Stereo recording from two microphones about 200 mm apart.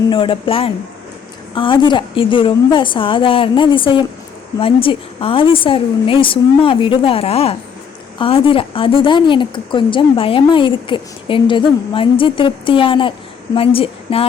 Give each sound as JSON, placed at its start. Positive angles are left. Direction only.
{"t": 0.1, "sound": "a woman's voice", "side_deg": 25}